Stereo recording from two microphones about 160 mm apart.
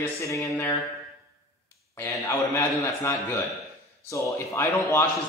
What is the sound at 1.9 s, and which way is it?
A man's voice, 15° left (ahead or behind).